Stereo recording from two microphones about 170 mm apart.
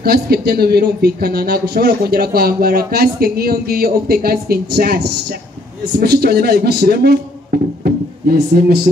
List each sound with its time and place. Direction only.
0.0 s speech: 65° right (ahead or behind)